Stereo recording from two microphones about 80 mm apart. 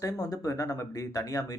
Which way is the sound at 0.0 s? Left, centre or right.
Left.